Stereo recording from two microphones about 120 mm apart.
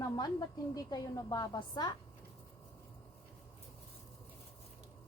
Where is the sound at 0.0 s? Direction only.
30° left (ahead or behind).